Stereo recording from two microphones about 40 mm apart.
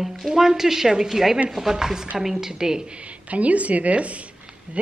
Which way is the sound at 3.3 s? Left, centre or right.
Right.